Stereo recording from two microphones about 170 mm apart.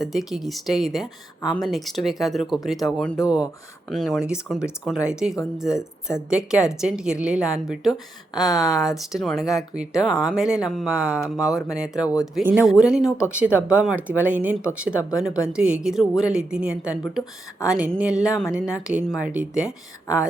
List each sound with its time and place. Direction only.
0.0 s speech: centre (ahead or behind)
5.7 s speech: 15° left (ahead or behind)
6.3 s speech: 5° right (ahead or behind)
8.4 s speech: 20° left (ahead or behind)
8.9 s speech: centre (ahead or behind)
19.6 s speech: 20° left (ahead or behind)